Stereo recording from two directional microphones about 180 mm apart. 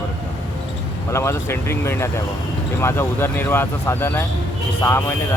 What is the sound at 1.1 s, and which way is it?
Speech, 15° left (ahead or behind).